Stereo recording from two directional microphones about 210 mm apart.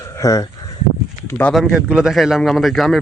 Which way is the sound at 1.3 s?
5° left (ahead or behind).